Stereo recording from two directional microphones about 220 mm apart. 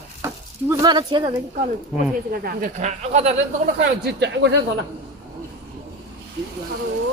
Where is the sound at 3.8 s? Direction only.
45° right (ahead or behind).